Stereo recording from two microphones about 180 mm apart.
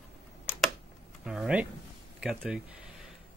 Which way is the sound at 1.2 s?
5° right (ahead or behind).